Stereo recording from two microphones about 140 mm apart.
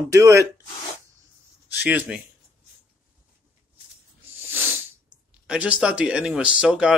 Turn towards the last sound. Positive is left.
turn(degrees=-5)  # may be behind; listen again after turning